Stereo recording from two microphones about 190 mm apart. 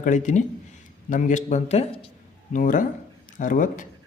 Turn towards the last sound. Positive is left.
turn(degrees=45)  # may be behind; listen again after turning